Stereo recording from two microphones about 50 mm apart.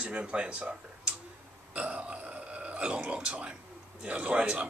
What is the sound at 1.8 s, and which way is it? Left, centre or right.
Burping, right.